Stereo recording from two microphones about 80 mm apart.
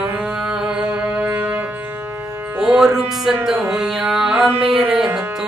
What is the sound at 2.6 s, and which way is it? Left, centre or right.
Speech, centre.